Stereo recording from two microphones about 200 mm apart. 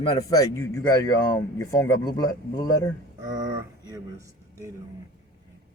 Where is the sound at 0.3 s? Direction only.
15° left (ahead or behind).